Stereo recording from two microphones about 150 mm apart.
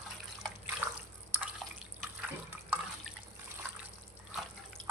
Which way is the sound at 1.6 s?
Centre (ahead or behind).